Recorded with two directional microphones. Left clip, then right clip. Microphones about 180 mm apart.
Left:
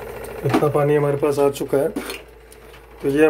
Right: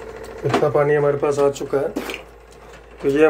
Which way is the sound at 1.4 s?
55° left (ahead or behind).